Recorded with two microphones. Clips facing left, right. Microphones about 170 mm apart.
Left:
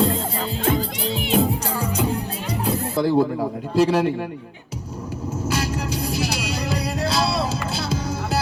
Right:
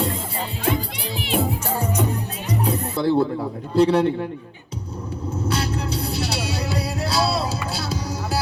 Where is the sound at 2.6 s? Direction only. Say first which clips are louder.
Left 1 dB; 5° left (ahead or behind).